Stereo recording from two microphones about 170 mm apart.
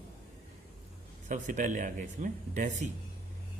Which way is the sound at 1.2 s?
50° right (ahead or behind).